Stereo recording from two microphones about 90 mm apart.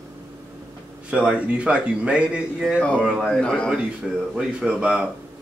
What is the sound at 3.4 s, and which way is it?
Speech, 10° left (ahead or behind).